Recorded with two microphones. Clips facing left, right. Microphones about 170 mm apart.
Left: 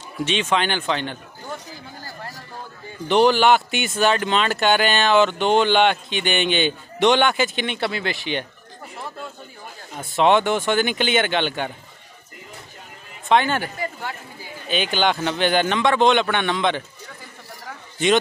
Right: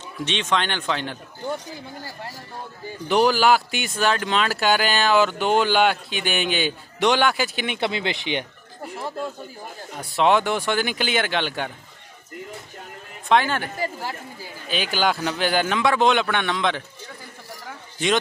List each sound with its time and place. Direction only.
0.2 s speech: 5° left (ahead or behind)
3.1 s speech: centre (ahead or behind)
7.7 s speech: 20° right (ahead or behind)
9.9 s speech: centre (ahead or behind)
13.3 s speech: centre (ahead or behind)
14.7 s speech: 5° right (ahead or behind)